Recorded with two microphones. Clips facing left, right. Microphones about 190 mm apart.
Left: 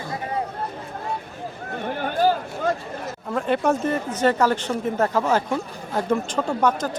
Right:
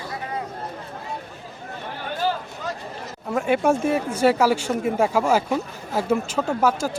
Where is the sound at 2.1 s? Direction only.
45° left (ahead or behind).